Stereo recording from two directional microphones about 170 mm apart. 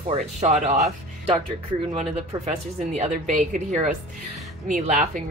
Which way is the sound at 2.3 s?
20° right (ahead or behind).